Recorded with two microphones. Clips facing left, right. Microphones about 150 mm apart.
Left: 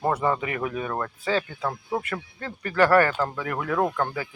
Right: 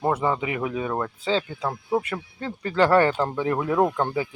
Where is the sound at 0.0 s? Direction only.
10° right (ahead or behind).